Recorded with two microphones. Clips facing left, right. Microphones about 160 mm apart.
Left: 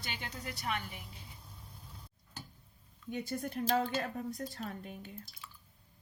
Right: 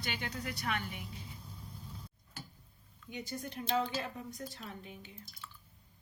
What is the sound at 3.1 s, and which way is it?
A woman's voice, 50° left (ahead or behind).